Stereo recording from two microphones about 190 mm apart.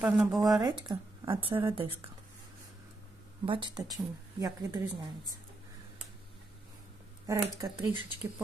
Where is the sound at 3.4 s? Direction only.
25° right (ahead or behind).